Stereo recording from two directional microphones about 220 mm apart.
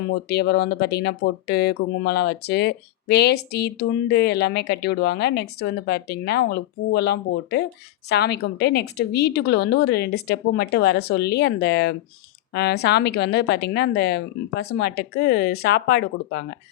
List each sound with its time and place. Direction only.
0.1 s speech: 50° left (ahead or behind)